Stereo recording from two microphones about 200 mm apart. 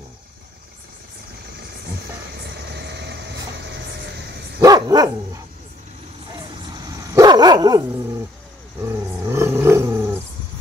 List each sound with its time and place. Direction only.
2.3 s vehicle: 55° right (ahead or behind)
4.6 s dog: 15° right (ahead or behind)
7.2 s dog: 20° right (ahead or behind)
8.8 s roar: 15° right (ahead or behind)